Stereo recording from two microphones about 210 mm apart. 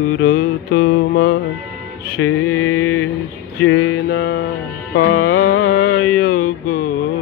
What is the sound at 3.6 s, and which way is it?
Music, 65° left (ahead or behind).